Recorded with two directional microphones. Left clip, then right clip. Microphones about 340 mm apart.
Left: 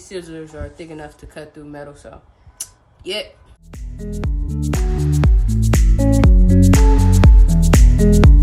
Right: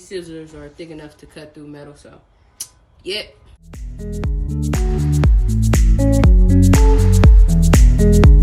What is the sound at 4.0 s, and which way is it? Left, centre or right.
Music, centre.